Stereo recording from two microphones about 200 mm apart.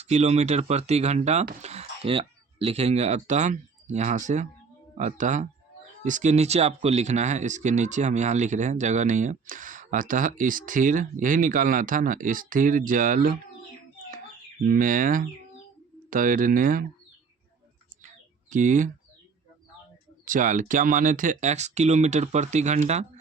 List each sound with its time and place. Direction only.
0.0 s speech: 35° right (ahead or behind)
14.6 s speech: 45° right (ahead or behind)
18.5 s speech: 40° right (ahead or behind)
20.2 s speech: 40° right (ahead or behind)